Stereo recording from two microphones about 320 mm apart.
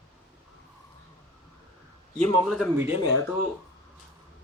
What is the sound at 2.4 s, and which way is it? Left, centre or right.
Speech, centre.